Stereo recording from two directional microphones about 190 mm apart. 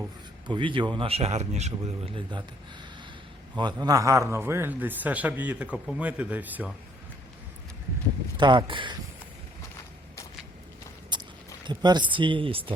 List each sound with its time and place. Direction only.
0.4 s speech: 25° right (ahead or behind)
3.5 s a man's voice: 25° right (ahead or behind)
8.4 s speech: 25° right (ahead or behind)
11.1 s a sound: 25° right (ahead or behind)
11.6 s speech: 25° right (ahead or behind)